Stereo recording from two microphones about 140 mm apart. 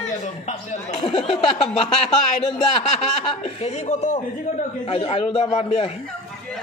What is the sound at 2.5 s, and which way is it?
A man's voice, 45° left (ahead or behind).